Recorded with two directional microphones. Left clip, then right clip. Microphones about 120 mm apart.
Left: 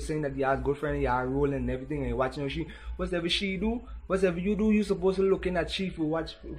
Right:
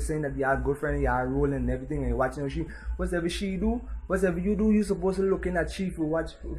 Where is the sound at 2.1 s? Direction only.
20° left (ahead or behind).